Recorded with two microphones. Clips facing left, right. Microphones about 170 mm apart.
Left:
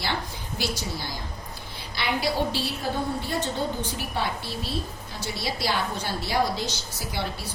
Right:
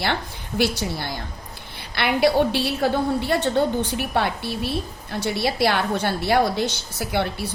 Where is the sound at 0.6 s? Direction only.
65° right (ahead or behind).